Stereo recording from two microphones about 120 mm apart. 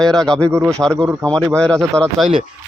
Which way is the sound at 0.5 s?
20° right (ahead or behind).